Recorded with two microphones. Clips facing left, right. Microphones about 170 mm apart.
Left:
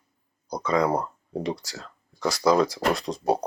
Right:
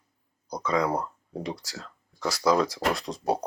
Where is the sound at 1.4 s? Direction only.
5° right (ahead or behind).